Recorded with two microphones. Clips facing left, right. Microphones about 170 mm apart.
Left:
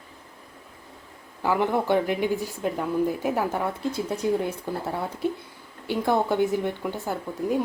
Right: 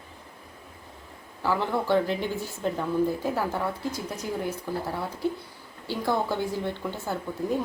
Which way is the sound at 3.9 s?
25° left (ahead or behind).